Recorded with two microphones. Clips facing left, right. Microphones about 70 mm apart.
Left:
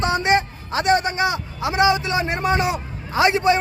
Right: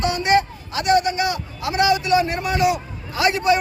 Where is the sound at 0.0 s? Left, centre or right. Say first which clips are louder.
Right 1 dB; left.